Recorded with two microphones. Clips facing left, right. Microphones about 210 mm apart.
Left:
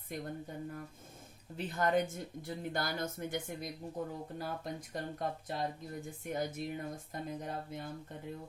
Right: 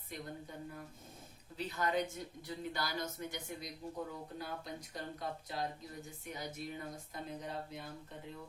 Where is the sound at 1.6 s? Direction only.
50° left (ahead or behind).